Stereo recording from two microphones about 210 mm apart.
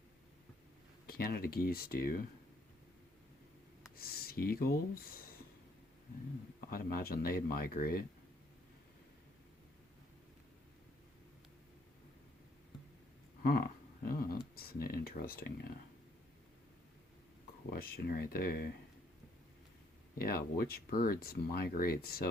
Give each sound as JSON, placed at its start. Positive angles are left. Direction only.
{"t": 1.0, "sound": "speech", "side_deg": 45}
{"t": 3.9, "sound": "speech", "side_deg": 45}
{"t": 6.7, "sound": "speech", "side_deg": 45}
{"t": 14.0, "sound": "speech", "side_deg": 45}
{"t": 17.7, "sound": "speech", "side_deg": 45}
{"t": 20.1, "sound": "speech", "side_deg": 45}